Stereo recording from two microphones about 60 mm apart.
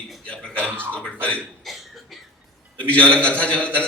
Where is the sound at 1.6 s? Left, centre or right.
Centre.